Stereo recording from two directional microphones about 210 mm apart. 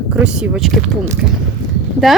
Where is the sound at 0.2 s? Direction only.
Centre (ahead or behind).